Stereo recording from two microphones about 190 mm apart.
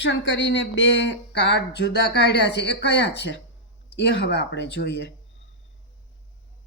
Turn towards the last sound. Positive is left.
turn(degrees=65)  # may be behind; listen again after turning